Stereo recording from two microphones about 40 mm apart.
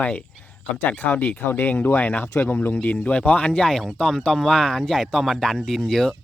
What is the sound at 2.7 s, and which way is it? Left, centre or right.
Speech, left.